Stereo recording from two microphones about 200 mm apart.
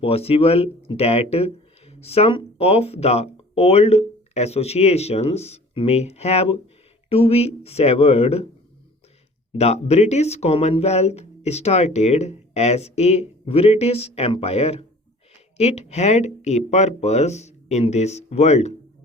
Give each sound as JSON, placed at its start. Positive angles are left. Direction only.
{"t": 0.0, "sound": "speech", "side_deg": 30}
{"t": 9.5, "sound": "speech", "side_deg": 30}